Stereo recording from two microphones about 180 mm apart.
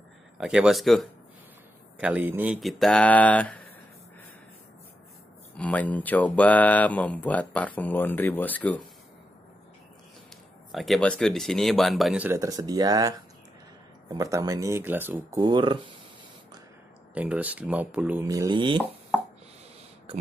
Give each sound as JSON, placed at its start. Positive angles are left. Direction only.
{"t": 0.4, "sound": "speech", "side_deg": -5}
{"t": 5.6, "sound": "speech", "side_deg": 10}
{"t": 10.7, "sound": "speech", "side_deg": 0}
{"t": 12.3, "sound": "speech", "side_deg": -20}
{"t": 15.1, "sound": "speech", "side_deg": -25}
{"t": 17.1, "sound": "speech", "side_deg": -10}